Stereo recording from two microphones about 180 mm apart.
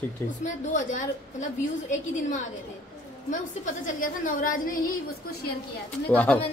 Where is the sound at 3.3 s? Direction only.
45° left (ahead or behind).